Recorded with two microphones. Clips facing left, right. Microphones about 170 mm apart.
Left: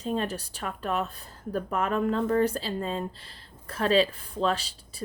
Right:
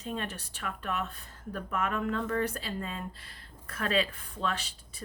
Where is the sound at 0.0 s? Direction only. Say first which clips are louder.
Left 7 dB; 35° left (ahead or behind).